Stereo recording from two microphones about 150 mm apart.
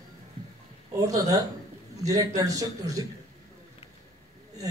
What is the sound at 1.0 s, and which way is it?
A man's voice, 25° right (ahead or behind).